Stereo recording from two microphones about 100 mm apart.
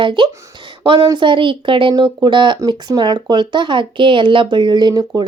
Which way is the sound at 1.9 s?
45° right (ahead or behind).